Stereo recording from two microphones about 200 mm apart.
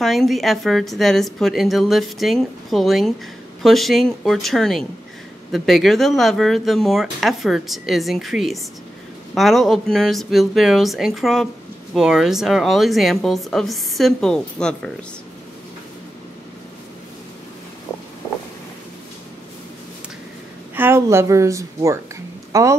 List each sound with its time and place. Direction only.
0.0 s speech: centre (ahead or behind)
20.7 s a woman's voice: 10° right (ahead or behind)